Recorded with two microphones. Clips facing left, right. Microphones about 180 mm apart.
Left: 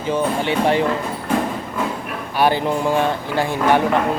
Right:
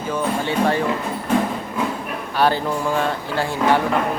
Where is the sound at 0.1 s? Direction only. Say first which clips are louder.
Left 3 dB; 20° left (ahead or behind).